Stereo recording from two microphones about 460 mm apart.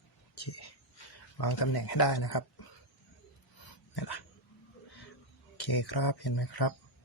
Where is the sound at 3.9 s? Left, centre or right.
Left.